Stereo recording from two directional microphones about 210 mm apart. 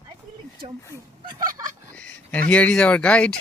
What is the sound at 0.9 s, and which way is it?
Speech, 15° right (ahead or behind).